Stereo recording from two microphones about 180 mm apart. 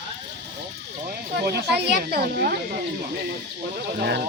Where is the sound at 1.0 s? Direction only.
65° right (ahead or behind).